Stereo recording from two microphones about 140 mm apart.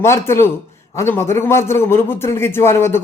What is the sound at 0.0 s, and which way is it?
A man's voice, 20° left (ahead or behind).